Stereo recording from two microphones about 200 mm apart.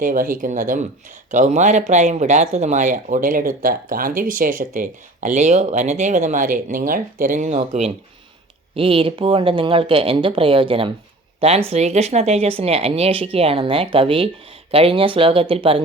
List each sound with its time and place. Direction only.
0.0 s speech: 45° right (ahead or behind)